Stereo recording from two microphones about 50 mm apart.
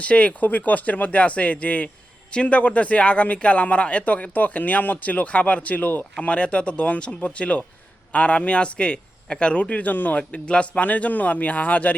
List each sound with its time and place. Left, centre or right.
0.0 s speech: left
6.1 s speech: left
10.8 s speech: left